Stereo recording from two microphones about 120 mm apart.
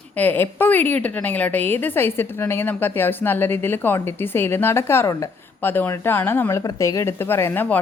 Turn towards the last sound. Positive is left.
turn(degrees=20)  # may be behind; listen again after turning